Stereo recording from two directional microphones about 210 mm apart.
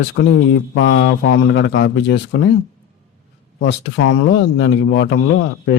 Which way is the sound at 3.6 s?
55° left (ahead or behind).